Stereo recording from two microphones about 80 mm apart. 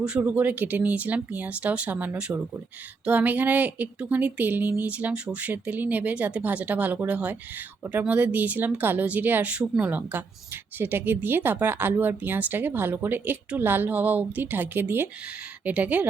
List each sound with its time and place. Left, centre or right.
0.0 s speech: centre